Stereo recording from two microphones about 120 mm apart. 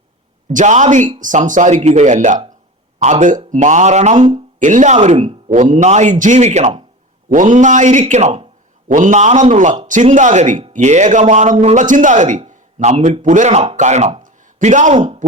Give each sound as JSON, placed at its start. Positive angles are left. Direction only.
{"t": 0.5, "sound": "speech", "side_deg": -90}
{"t": 4.6, "sound": "speech", "side_deg": -90}
{"t": 5.2, "sound": "speech", "side_deg": -90}
{"t": 7.3, "sound": "speech", "side_deg": -90}
{"t": 9.0, "sound": "speech", "side_deg": -85}
{"t": 10.7, "sound": "speech", "side_deg": -75}
{"t": 11.5, "sound": "speech", "side_deg": -75}
{"t": 12.5, "sound": "a sound", "side_deg": -80}
{"t": 13.2, "sound": "speech", "side_deg": -90}
{"t": 14.2, "sound": "a sound", "side_deg": -90}